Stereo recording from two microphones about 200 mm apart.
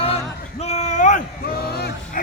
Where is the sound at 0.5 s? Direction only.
35° left (ahead or behind); by 2.2 s 50° left (ahead or behind).